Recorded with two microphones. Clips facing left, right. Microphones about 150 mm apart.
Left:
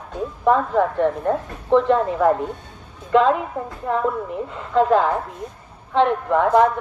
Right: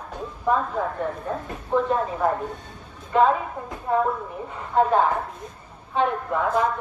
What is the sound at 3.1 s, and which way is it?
A woman's voice, 90° left.